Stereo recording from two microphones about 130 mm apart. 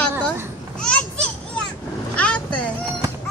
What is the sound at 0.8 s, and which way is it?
Children playing, 5° left (ahead or behind).